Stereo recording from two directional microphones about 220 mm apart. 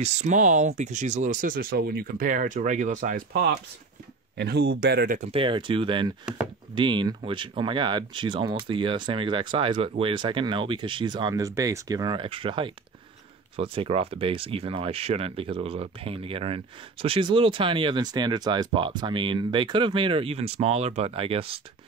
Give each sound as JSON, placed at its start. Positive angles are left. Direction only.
{"t": 0.0, "sound": "speech", "side_deg": -30}
{"t": 5.3, "sound": "speech", "side_deg": -25}